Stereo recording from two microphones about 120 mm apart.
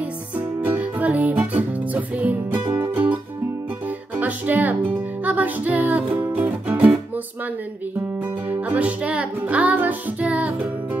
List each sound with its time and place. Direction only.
0.7 s music: 10° right (ahead or behind)
4.2 s music: 15° right (ahead or behind)
8.5 s music: 10° right (ahead or behind)